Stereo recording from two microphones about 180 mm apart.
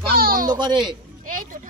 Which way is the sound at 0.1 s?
55° right (ahead or behind).